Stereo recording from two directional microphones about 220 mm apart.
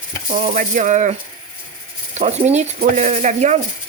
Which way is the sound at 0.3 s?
35° right (ahead or behind).